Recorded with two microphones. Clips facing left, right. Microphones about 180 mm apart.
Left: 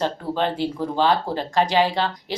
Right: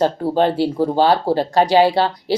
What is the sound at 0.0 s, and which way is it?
Speech, 40° right (ahead or behind).